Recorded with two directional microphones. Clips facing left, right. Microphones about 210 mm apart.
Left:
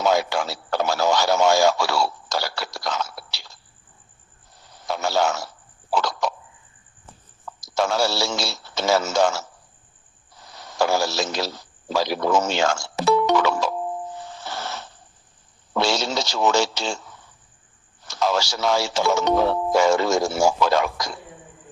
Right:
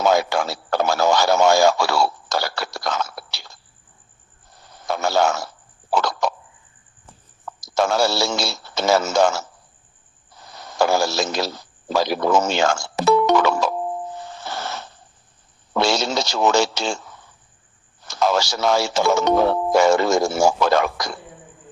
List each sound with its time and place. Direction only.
0.0 s radio: 55° right (ahead or behind)
4.6 s a sound: 55° right (ahead or behind)
7.6 s speech: 50° right (ahead or behind)
10.4 s a man's voice: 50° right (ahead or behind)
14.3 s wheeze: 55° right (ahead or behind)
15.7 s speech: 50° right (ahead or behind)
18.1 s speech: 50° right (ahead or behind)